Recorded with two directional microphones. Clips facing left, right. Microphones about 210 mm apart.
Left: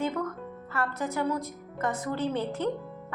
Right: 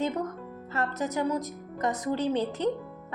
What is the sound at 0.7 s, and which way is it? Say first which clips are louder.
A woman's voice: right 1 dB; 20° right (ahead or behind).